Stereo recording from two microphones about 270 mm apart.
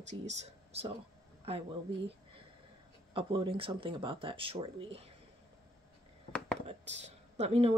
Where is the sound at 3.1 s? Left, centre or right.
Centre.